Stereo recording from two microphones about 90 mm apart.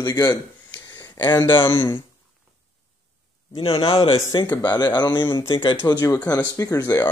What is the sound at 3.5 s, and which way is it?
Speech, 85° left.